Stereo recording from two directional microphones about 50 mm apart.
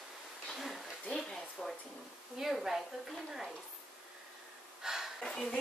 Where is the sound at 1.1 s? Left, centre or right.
Centre.